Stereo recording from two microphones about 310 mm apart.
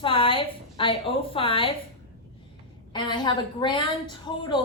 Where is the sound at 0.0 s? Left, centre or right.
Centre.